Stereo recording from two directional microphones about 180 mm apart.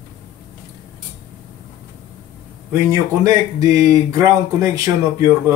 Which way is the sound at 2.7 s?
20° right (ahead or behind).